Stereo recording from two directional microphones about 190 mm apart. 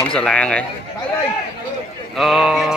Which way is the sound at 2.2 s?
Centre (ahead or behind).